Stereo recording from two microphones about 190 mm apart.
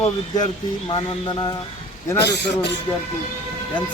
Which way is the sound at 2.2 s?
65° left (ahead or behind).